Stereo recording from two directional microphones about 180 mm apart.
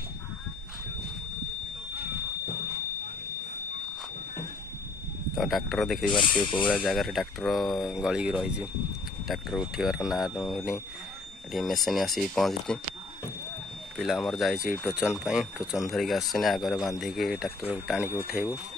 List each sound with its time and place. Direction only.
5.3 s speech: centre (ahead or behind)
6.0 s speech: 25° left (ahead or behind)
6.7 s speech: centre (ahead or behind)
13.9 s speech: centre (ahead or behind)